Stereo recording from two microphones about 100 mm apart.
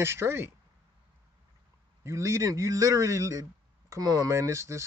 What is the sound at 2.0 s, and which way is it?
A man's voice, 30° right (ahead or behind).